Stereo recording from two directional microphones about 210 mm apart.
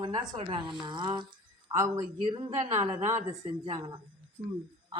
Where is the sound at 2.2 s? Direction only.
35° right (ahead or behind).